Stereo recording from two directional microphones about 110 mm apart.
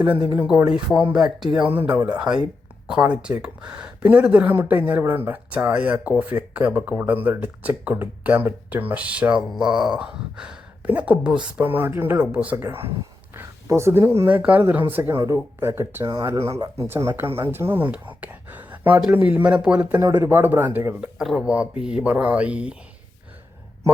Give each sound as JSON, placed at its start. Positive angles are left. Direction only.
{"t": 0.5, "sound": "speech", "side_deg": -5}
{"t": 1.6, "sound": "speech", "side_deg": -15}
{"t": 2.3, "sound": "speech", "side_deg": -40}
{"t": 2.8, "sound": "speech", "side_deg": -5}
{"t": 12.5, "sound": "speech", "side_deg": -25}
{"t": 16.0, "sound": "speech", "side_deg": -30}
{"t": 21.0, "sound": "speech", "side_deg": -5}